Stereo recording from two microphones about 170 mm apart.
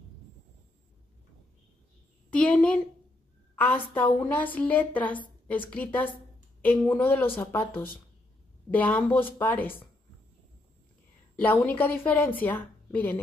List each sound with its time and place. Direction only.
2.3 s a woman's voice: 5° left (ahead or behind)
11.4 s a woman's voice: 10° left (ahead or behind)